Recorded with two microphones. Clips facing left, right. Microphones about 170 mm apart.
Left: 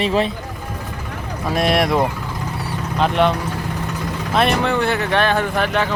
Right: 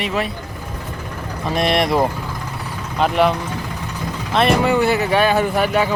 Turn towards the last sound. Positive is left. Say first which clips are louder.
# right 2 dB
turn(degrees=-10)  # may be behind; listen again after turning